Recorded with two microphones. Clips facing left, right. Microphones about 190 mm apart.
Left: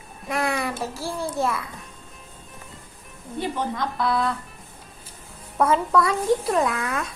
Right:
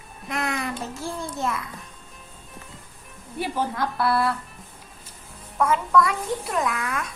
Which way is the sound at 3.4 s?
5° right (ahead or behind).